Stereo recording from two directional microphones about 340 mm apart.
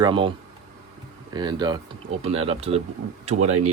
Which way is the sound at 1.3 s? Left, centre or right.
Centre.